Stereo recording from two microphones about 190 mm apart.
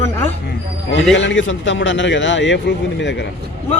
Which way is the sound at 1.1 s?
75° left (ahead or behind).